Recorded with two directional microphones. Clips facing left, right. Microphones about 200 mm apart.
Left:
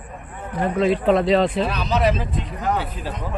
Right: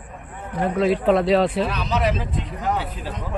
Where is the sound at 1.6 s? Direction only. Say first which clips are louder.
Left 2 dB; 35° left (ahead or behind).